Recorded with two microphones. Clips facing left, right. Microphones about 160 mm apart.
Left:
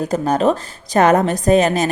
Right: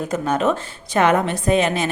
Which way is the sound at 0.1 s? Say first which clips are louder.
Left 3 dB; 35° left (ahead or behind).